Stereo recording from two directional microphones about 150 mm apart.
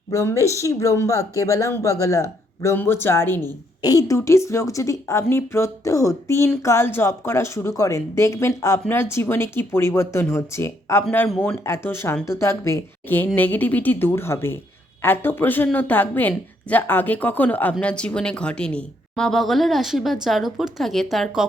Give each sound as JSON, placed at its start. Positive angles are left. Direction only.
{"t": 0.1, "sound": "a woman's voice", "side_deg": 20}
{"t": 11.3, "sound": "speech", "side_deg": 5}
{"t": 11.6, "sound": "a woman's voice", "side_deg": 15}